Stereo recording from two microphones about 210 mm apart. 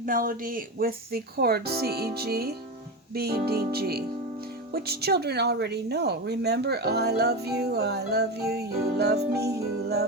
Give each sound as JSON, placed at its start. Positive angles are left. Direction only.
{"t": 0.0, "sound": "speech", "side_deg": -40}